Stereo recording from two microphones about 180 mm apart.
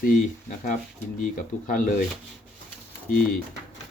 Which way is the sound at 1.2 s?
45° left (ahead or behind).